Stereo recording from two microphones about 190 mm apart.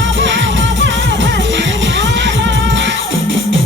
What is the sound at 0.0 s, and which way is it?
Music, 70° right (ahead or behind).